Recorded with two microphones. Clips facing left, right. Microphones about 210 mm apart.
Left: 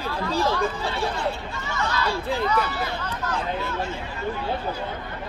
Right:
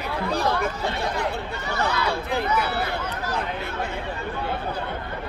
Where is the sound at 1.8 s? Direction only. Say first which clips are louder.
Right 1 dB; 60° right (ahead or behind).